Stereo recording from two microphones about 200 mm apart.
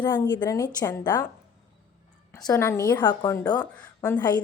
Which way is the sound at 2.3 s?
15° left (ahead or behind).